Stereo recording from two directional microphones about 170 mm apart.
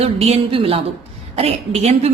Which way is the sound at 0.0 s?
35° right (ahead or behind).